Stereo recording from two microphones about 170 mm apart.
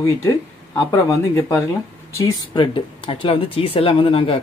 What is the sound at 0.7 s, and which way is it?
Speech, 20° left (ahead or behind).